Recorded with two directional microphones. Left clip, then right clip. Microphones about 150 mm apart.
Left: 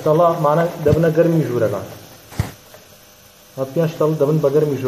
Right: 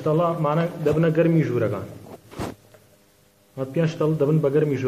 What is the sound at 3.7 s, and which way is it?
Speech, 5° left (ahead or behind).